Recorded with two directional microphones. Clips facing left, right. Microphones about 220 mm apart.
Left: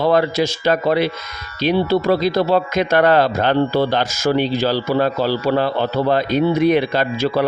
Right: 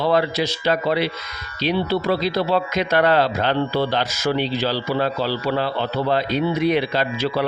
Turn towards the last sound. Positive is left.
turn(degrees=45)  # may be behind; listen again after turning